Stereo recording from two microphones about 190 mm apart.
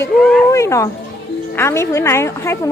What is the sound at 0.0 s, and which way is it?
A woman's voice, 15° left (ahead or behind).